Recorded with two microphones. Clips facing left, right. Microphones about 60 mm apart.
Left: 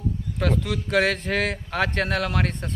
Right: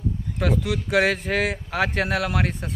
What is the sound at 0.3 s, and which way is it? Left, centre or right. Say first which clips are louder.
Speech: right 1 dB; centre.